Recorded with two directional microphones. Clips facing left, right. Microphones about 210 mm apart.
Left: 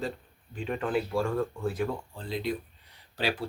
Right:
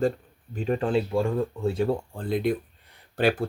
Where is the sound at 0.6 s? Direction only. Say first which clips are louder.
Right 5 dB; 35° right (ahead or behind).